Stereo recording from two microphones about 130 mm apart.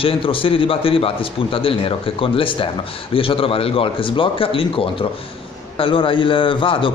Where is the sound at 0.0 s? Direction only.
45° left (ahead or behind).